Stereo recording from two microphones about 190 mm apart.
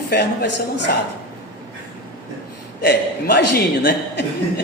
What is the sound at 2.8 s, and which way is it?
A man's voice, 60° left (ahead or behind).